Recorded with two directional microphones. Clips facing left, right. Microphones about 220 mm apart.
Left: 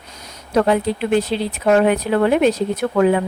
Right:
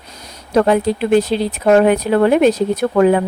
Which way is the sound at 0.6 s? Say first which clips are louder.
Right 3 dB; 45° right (ahead or behind).